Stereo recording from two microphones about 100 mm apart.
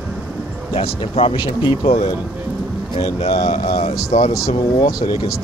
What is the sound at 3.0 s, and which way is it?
Speech, 90° left.